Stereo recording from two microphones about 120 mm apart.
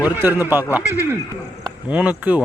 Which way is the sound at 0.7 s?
10° right (ahead or behind).